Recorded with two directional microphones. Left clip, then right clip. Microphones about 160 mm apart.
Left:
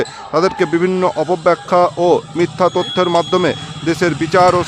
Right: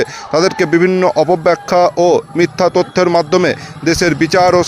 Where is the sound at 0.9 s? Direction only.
10° right (ahead or behind).